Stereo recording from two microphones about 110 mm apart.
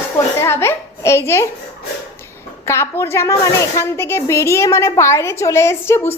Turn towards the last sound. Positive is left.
turn(degrees=25)  # may be behind; listen again after turning